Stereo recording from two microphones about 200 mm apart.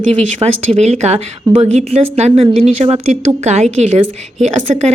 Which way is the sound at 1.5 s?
20° right (ahead or behind).